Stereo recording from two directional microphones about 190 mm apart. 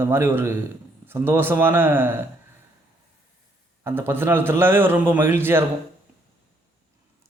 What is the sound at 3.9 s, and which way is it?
Speech, 15° right (ahead or behind).